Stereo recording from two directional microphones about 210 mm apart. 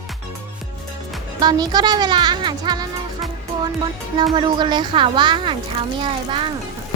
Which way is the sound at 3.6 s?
20° right (ahead or behind).